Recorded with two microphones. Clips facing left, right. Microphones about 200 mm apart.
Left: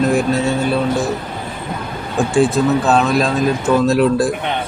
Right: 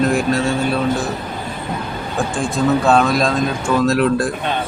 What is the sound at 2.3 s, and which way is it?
Speech, 5° left (ahead or behind).